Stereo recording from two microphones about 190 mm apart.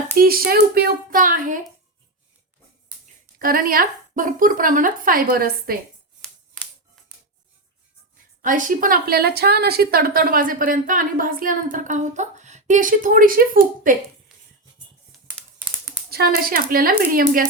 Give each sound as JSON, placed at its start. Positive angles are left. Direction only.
{"t": 0.2, "sound": "a woman's voice", "side_deg": -50}
{"t": 3.3, "sound": "a woman's voice", "side_deg": -50}
{"t": 8.4, "sound": "a woman's voice", "side_deg": -45}
{"t": 15.3, "sound": "a sound", "side_deg": -10}
{"t": 16.0, "sound": "a woman's voice", "side_deg": -55}